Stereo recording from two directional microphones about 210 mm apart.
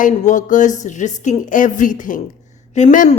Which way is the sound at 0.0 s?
35° left (ahead or behind).